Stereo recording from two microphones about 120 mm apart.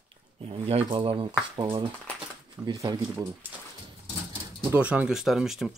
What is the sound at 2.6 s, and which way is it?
Speech, 30° right (ahead or behind).